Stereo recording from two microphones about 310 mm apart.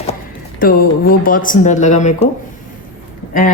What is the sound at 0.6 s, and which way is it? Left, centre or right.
Speech, left.